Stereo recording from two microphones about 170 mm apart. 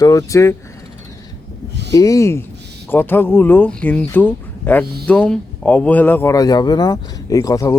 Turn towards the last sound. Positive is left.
turn(degrees=20)  # may be behind; listen again after turning